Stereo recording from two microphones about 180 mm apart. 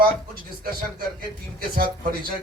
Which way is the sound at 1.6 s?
55° right (ahead or behind).